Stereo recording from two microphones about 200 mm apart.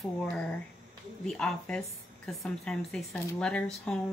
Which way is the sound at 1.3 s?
5° left (ahead or behind).